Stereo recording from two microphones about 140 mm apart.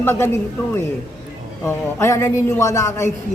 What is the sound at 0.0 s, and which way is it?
Speech, 15° left (ahead or behind).